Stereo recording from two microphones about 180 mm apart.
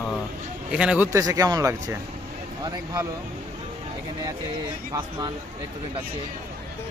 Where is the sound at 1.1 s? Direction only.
20° right (ahead or behind).